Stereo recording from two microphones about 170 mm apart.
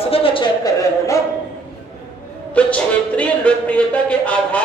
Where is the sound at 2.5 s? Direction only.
10° left (ahead or behind).